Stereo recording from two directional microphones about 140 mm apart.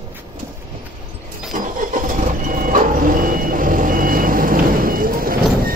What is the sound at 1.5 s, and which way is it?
Vehicle, 70° right (ahead or behind).